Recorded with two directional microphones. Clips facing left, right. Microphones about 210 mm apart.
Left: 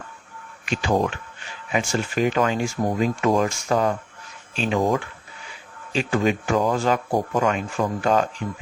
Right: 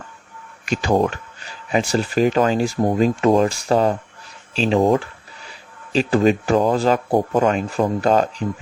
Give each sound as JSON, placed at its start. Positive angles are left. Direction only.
{"t": 0.6, "sound": "speech", "side_deg": -40}